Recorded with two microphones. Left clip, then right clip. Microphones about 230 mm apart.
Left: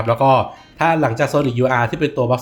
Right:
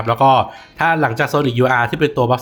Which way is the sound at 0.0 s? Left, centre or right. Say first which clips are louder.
Right 2 dB; centre.